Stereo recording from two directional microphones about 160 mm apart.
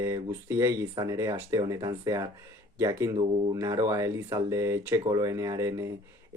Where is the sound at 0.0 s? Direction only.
20° right (ahead or behind).